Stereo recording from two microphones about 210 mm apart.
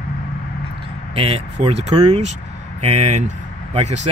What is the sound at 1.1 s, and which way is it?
Speech, 30° right (ahead or behind).